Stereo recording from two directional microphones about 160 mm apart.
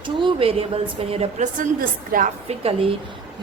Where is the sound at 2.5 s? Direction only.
40° right (ahead or behind).